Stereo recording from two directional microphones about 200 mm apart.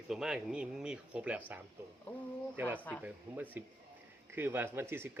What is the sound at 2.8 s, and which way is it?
Speech, 10° left (ahead or behind).